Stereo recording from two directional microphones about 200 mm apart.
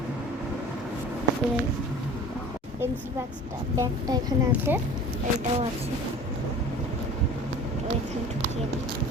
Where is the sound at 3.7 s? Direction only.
20° right (ahead or behind).